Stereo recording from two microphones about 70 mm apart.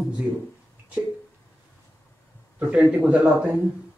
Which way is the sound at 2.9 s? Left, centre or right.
Right.